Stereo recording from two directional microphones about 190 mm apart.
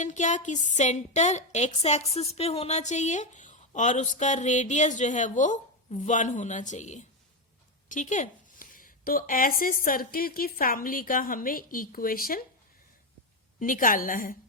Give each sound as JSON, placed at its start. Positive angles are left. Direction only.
{"t": 0.0, "sound": "a woman's voice", "side_deg": 40}
{"t": 13.6, "sound": "a woman's voice", "side_deg": 45}